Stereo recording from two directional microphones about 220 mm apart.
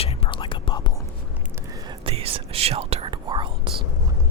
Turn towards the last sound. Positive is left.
turn(degrees=-25)  # may be behind; listen again after turning